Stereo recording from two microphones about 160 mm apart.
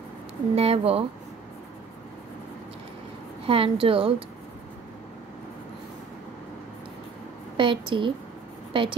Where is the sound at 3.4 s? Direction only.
35° right (ahead or behind).